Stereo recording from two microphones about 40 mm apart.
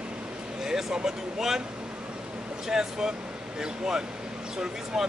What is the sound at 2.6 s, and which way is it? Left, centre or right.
Speech, centre.